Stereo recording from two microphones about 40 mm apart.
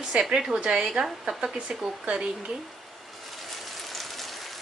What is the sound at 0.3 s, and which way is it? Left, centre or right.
A woman's voice, centre.